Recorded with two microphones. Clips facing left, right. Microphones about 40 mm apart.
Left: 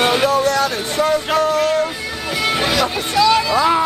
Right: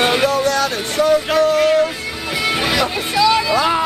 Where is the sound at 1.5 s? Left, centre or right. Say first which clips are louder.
Right 3 dB; right.